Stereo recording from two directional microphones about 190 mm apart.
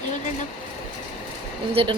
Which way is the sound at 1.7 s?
30° right (ahead or behind).